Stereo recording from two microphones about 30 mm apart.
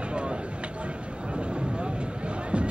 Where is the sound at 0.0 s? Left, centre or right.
Right.